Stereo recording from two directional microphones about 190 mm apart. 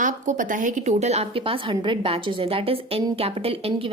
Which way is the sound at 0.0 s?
40° right (ahead or behind).